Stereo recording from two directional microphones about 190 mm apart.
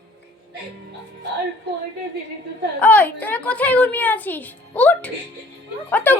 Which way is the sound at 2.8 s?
10° left (ahead or behind).